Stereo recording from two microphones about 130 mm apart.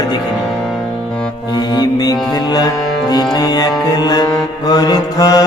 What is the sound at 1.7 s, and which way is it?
Music, 30° left (ahead or behind).